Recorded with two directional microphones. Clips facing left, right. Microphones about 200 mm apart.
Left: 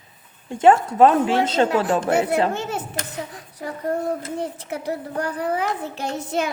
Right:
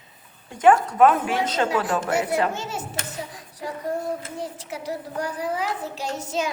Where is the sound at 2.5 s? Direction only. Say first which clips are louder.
Left 4 dB; 60° left (ahead or behind).